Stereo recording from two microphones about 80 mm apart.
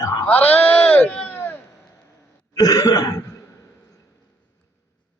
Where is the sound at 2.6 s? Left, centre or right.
Left.